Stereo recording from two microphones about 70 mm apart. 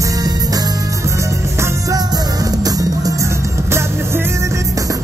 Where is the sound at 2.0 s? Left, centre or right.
Right.